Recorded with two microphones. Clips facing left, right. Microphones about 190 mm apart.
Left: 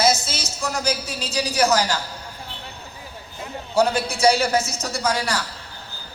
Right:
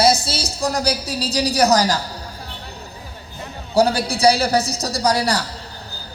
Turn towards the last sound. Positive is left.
turn(degrees=-35)  # may be behind; listen again after turning